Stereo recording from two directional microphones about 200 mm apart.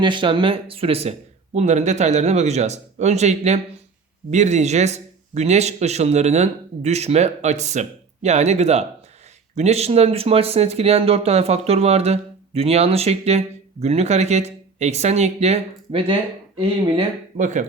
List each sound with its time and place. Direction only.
0.0 s speech: 25° right (ahead or behind)
17.3 s speech: 40° right (ahead or behind)